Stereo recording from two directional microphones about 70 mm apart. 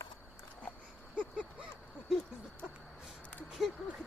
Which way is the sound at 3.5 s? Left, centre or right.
Centre.